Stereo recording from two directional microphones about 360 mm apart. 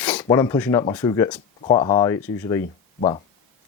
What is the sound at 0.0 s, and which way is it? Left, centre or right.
Speech, centre.